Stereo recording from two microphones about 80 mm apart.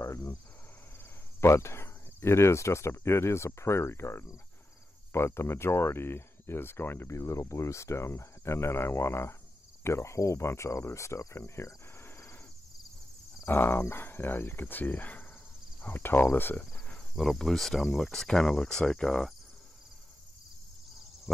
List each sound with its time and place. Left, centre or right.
0.0 s cricket: left
1.4 s speech: left
13.5 s speech: left
17.1 s speech: centre